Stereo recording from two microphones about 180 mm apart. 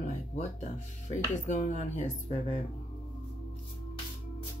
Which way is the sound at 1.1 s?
40° left (ahead or behind).